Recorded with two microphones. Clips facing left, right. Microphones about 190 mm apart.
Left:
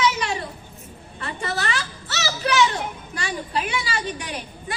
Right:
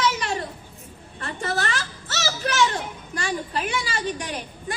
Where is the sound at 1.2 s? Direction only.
45° right (ahead or behind).